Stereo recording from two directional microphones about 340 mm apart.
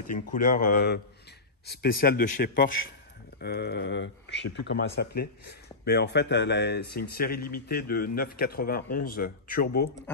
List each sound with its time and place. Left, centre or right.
0.1 s speech: left
10.1 s speech: centre